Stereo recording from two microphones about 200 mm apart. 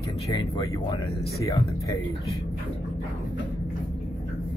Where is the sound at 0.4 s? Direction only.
25° left (ahead or behind).